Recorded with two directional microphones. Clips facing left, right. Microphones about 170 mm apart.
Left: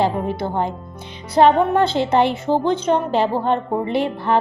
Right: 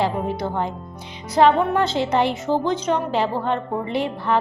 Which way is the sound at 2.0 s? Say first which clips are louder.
Left 3 dB; 25° left (ahead or behind).